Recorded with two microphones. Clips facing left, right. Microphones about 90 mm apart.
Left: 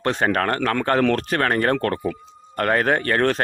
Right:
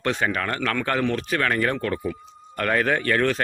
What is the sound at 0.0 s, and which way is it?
Speech, 40° left (ahead or behind).